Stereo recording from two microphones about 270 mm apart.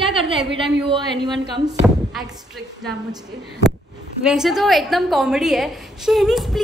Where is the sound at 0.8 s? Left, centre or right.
Centre.